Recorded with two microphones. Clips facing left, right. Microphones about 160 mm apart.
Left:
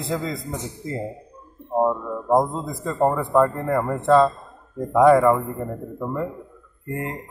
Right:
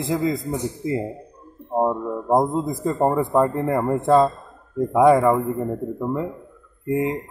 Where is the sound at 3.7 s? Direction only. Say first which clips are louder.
Right 2 dB; 20° right (ahead or behind).